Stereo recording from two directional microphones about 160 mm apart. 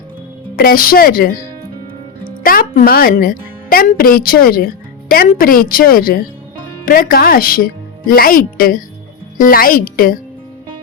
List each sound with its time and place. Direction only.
0.5 s a woman's voice: 65° left (ahead or behind)